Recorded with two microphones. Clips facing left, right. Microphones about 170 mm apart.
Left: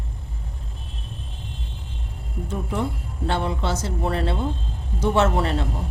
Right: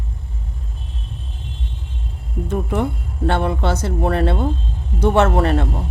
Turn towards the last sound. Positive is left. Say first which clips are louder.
# right 5 dB
turn(degrees=-55)  # may be behind; listen again after turning